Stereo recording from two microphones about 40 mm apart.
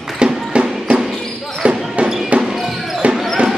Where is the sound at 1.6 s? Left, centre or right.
Right.